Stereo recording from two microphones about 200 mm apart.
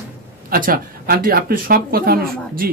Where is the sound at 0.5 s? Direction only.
45° right (ahead or behind).